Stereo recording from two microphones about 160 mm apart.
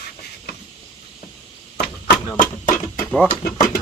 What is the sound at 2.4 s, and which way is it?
Music, 55° left (ahead or behind).